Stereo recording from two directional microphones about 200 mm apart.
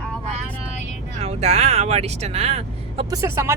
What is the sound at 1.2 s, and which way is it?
Speech, 30° right (ahead or behind).